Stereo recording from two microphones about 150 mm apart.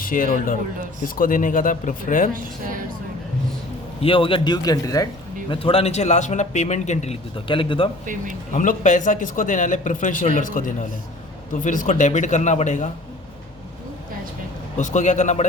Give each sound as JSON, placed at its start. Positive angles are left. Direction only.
{"t": 0.0, "sound": "a man's voice", "side_deg": 70}
{"t": 2.3, "sound": "speech", "side_deg": -65}
{"t": 4.0, "sound": "speech", "side_deg": 35}
{"t": 5.5, "sound": "a man's voice", "side_deg": 40}
{"t": 8.5, "sound": "speech", "side_deg": 55}
{"t": 14.8, "sound": "a man's voice", "side_deg": 55}